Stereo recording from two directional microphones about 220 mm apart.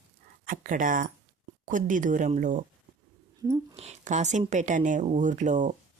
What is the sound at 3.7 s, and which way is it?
Speech, 30° right (ahead or behind).